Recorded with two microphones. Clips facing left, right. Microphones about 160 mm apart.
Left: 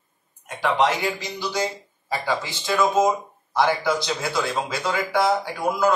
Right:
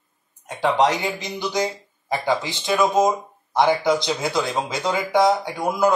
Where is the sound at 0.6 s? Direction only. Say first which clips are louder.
Right 2 dB; 20° right (ahead or behind).